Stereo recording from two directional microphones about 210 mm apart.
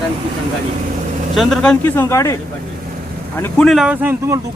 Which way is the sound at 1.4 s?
5° left (ahead or behind).